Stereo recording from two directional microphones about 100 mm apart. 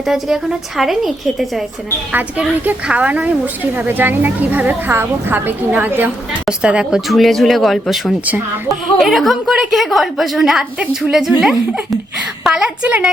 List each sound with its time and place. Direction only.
0.8 s a woman's voice: centre (ahead or behind)
2.1 s a woman's voice: 15° right (ahead or behind)
7.1 s a woman's voice: centre (ahead or behind)